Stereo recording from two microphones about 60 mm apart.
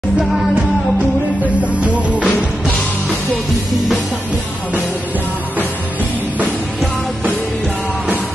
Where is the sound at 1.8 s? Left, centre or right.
Right.